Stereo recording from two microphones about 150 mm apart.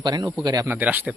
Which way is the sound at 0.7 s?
10° right (ahead or behind).